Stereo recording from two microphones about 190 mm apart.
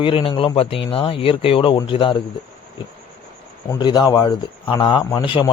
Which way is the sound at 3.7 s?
20° left (ahead or behind).